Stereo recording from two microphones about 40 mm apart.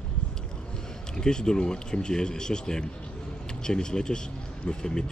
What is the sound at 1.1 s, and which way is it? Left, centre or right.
Speech, centre.